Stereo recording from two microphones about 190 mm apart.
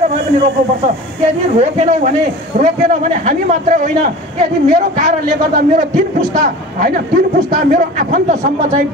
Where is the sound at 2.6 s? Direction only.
40° right (ahead or behind).